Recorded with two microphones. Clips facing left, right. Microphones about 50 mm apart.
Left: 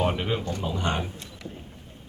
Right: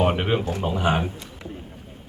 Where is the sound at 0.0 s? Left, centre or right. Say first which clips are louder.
Right 5 dB; right.